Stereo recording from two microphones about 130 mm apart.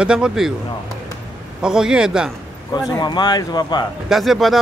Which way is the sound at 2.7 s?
35° left (ahead or behind).